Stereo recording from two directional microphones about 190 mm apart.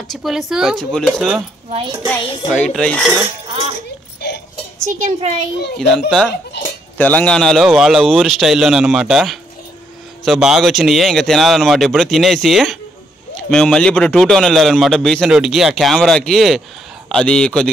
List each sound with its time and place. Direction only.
0.1 s speech: centre (ahead or behind)
1.7 s a woman's voice: 30° right (ahead or behind)
2.0 s music: 10° left (ahead or behind)
2.7 s speech: centre (ahead or behind)
4.9 s speech: 40° right (ahead or behind)
5.8 s speech: centre (ahead or behind)